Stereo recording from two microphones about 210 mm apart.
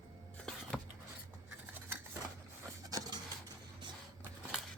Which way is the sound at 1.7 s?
10° right (ahead or behind).